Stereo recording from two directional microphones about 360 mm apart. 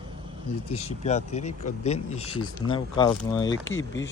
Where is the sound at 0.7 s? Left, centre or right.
Centre.